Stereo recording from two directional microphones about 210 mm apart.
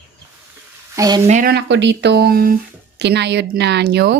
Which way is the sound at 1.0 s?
20° right (ahead or behind).